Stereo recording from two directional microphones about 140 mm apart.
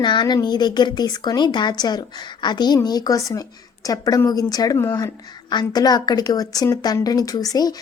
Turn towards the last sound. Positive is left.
turn(degrees=25)  # may be behind; listen again after turning